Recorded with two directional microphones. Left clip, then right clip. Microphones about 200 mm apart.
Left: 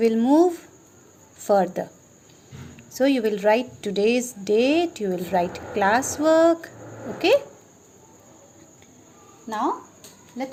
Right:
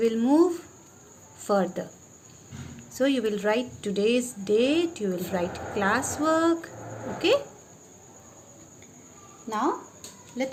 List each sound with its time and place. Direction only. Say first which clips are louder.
0.0 s a woman's voice: left 4 dB; 25° left (ahead or behind)
2.9 s a woman's voice: left 4 dB; 30° left (ahead or behind)
9.5 s a woman's voice: left 2 dB; 25° left (ahead or behind)